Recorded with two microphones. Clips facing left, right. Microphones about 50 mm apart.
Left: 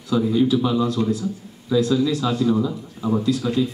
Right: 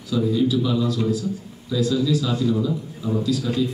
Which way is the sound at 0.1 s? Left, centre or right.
Left.